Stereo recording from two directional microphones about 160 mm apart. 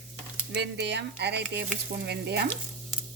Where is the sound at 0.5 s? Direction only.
90° right.